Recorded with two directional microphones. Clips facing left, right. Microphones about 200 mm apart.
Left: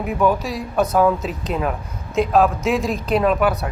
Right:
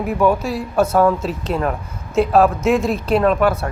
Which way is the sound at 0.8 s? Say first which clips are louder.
Right 2 dB; 15° left (ahead or behind).